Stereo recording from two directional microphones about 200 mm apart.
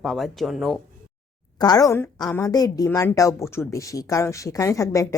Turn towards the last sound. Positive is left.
turn(degrees=15)  # may be behind; listen again after turning